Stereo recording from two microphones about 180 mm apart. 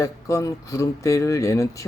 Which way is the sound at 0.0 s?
15° left (ahead or behind).